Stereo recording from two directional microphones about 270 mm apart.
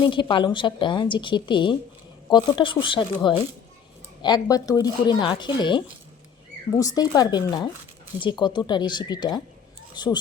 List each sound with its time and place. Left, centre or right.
0.0 s a woman's voice: centre